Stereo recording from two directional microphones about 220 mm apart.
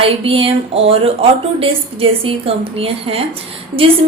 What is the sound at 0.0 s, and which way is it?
A woman's voice, 25° right (ahead or behind).